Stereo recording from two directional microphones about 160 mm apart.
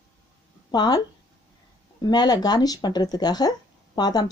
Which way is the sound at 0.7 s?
25° left (ahead or behind).